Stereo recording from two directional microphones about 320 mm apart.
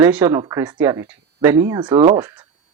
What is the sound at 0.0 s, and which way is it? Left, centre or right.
Speech, centre.